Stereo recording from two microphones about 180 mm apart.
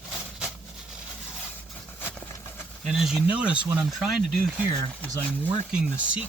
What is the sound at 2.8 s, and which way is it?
Speech, centre (ahead or behind).